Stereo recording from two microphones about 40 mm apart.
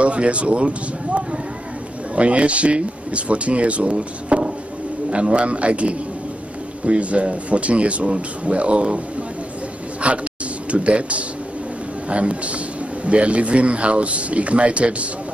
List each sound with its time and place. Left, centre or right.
0.0 s a man's voice: right
10.0 s a man's voice: right